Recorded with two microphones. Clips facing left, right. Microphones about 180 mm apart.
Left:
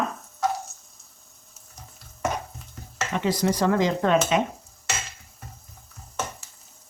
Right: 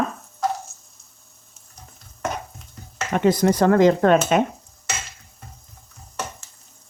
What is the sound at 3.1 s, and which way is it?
Speech, 50° right (ahead or behind).